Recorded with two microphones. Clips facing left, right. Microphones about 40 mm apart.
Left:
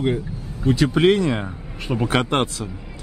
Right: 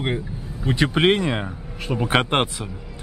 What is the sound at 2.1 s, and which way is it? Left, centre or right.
Speech, right.